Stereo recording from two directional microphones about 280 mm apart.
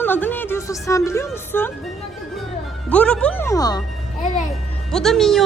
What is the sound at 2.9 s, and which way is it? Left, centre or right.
Speech, centre.